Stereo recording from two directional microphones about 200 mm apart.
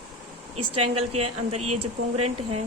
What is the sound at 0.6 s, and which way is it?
Speech, 30° right (ahead or behind).